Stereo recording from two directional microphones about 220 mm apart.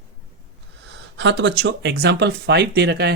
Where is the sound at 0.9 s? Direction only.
55° right (ahead or behind).